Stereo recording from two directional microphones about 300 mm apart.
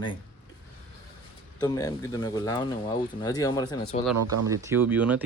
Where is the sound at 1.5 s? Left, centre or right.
Centre.